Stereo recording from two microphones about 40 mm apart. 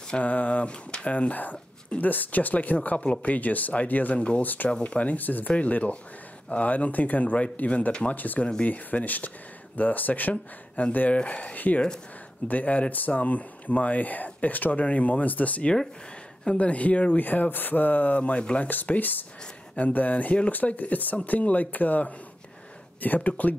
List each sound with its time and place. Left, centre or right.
0.2 s speech: left
1.1 s speech: left
4.6 s speech: left
17.2 s speech: left
18.7 s speech: left